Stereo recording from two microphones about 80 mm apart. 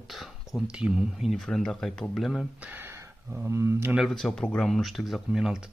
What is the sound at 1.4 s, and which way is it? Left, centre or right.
Speech, centre.